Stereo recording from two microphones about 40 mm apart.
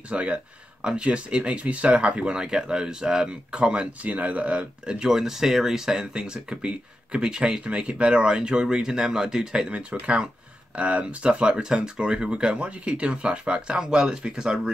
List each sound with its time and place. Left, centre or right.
0.1 s speech: right
2.3 s speech: centre
4.1 s speech: right
4.9 s speech: centre